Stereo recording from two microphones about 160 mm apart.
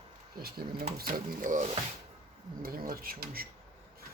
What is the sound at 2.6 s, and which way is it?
Speech, 65° right (ahead or behind).